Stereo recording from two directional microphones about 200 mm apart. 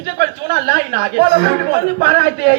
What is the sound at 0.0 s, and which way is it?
Speech, 50° right (ahead or behind).